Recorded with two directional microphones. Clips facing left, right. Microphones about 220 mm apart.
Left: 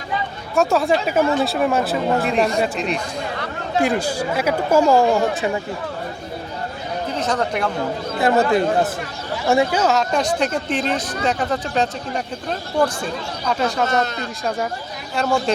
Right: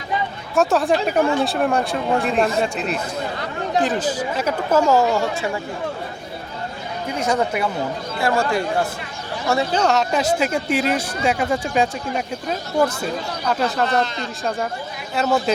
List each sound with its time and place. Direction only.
0.5 s speech: centre (ahead or behind)
3.8 s speech: 10° left (ahead or behind)
7.1 s speech: 10° right (ahead or behind)
8.2 s speech: 20° left (ahead or behind)
9.8 s speech: centre (ahead or behind)
15.1 s speech: 5° right (ahead or behind)